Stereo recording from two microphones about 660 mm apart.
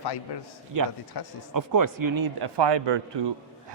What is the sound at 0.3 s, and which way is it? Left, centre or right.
Speech, left.